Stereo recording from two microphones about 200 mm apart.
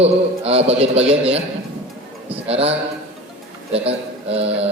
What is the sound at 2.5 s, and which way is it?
A man's voice, 30° right (ahead or behind).